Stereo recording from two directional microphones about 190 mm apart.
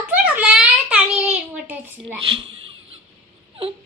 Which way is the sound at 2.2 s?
30° right (ahead or behind).